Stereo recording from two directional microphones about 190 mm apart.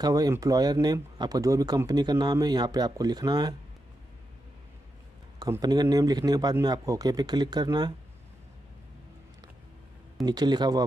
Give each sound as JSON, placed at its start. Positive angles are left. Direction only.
{"t": 0.0, "sound": "speech", "side_deg": -20}
{"t": 5.4, "sound": "speech", "side_deg": -20}
{"t": 10.2, "sound": "speech", "side_deg": -20}